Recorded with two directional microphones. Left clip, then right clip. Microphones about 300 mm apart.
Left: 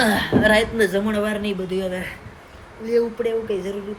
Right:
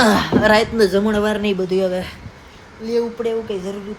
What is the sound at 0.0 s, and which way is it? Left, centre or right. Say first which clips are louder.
A woman's voice: right 3 dB; centre.